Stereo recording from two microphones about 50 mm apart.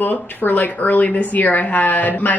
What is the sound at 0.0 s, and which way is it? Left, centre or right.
A woman's voice, left.